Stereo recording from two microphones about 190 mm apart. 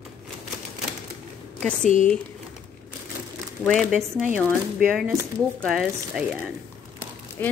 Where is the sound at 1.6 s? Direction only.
5° left (ahead or behind).